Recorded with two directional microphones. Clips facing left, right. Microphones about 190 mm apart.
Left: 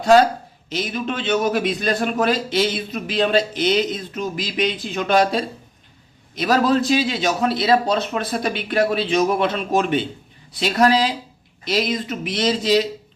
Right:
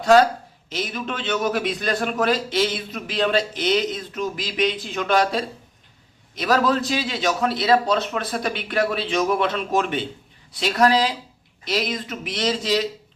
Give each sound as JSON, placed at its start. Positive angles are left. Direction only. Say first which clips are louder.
{"t": 0.0, "sound": "a man's voice", "louder": "left 1 dB", "side_deg": 25}
{"t": 6.4, "sound": "a man's voice", "louder": "left 3 dB", "side_deg": 25}